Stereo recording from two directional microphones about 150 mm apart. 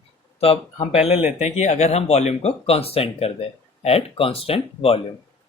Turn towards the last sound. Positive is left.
turn(degrees=40)  # may be behind; listen again after turning